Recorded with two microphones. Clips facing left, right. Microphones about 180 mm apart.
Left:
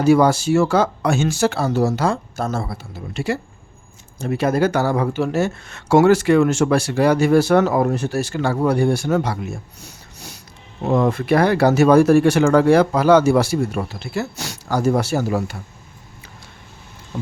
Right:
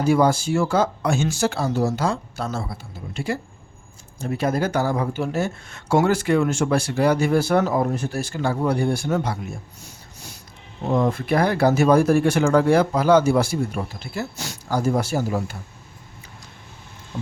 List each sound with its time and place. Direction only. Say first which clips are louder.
0.0 s speech: left 4 dB; 80° left
2.3 s speech: left 4 dB; 50° left (ahead or behind); by 9.4 s 75° left (ahead or behind)
9.8 s snort: left 3 dB; 70° left (ahead or behind)
10.8 s speech: left 3 dB; 75° left (ahead or behind)